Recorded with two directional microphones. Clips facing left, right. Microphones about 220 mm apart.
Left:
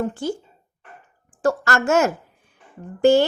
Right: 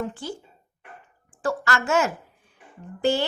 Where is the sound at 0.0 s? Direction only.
45° left (ahead or behind).